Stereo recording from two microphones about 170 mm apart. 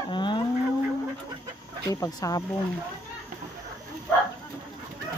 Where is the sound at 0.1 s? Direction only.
25° left (ahead or behind).